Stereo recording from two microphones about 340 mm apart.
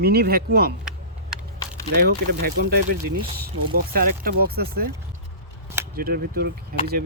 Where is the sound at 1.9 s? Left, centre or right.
Right.